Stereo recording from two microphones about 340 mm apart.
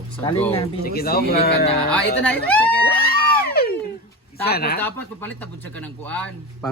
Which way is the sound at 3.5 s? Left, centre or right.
Left.